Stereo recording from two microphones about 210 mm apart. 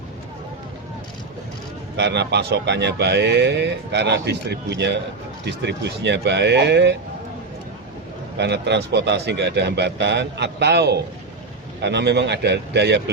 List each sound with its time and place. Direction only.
2.0 s speech: 55° right (ahead or behind)
8.4 s a man's voice: 55° right (ahead or behind)